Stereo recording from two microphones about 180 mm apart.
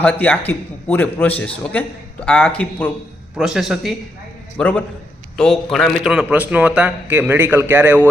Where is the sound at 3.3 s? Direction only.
5° right (ahead or behind).